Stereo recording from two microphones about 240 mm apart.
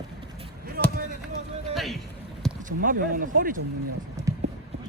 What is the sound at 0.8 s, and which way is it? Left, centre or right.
Basketball bounce, right.